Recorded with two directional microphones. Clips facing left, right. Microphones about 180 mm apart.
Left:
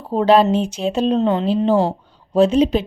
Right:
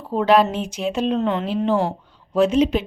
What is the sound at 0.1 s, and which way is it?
Speech, 35° left (ahead or behind).